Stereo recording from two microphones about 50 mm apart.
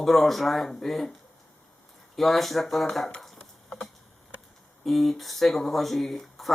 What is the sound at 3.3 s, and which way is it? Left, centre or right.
Patter, centre.